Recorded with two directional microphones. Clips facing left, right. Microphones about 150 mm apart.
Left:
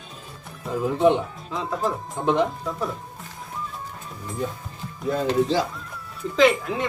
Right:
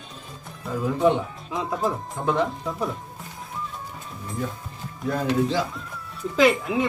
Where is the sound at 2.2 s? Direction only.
20° left (ahead or behind).